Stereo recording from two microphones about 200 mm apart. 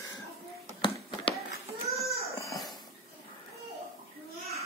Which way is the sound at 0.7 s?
25° left (ahead or behind).